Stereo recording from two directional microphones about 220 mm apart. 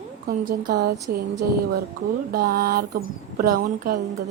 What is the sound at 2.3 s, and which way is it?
Speech, 45° right (ahead or behind).